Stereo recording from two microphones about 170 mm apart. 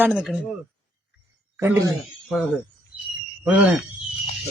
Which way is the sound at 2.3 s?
Centre (ahead or behind).